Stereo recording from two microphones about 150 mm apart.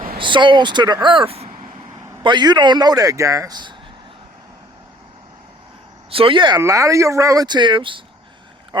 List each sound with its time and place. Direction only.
0.2 s speech: 30° right (ahead or behind)
6.1 s speech: 35° right (ahead or behind)
6.6 s speech: 20° right (ahead or behind)